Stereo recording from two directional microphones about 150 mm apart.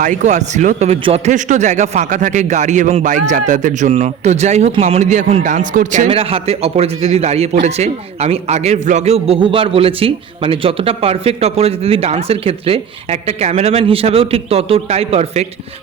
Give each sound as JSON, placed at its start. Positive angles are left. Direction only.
{"t": 0.0, "sound": "a man's voice", "side_deg": -55}
{"t": 6.1, "sound": "a man's voice", "side_deg": -40}